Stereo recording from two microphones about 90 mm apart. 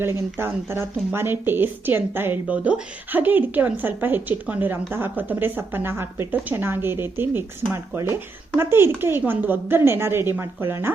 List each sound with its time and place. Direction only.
0.3 s speech: 25° right (ahead or behind)